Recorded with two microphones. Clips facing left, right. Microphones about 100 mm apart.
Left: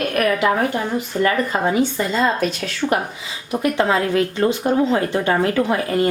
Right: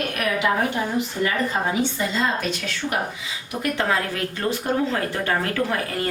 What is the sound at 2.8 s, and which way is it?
Speech, 50° left (ahead or behind).